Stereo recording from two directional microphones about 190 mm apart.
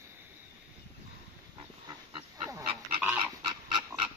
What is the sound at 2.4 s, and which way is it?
Dog, 10° right (ahead or behind).